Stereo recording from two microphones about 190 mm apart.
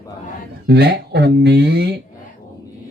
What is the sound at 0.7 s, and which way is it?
Speech, 55° right (ahead or behind).